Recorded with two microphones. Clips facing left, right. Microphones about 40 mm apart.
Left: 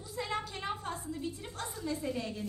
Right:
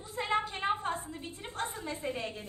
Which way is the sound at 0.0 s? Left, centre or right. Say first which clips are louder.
Right 5 dB; right.